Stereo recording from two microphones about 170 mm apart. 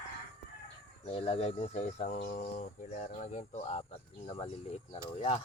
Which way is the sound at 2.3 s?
50° left (ahead or behind).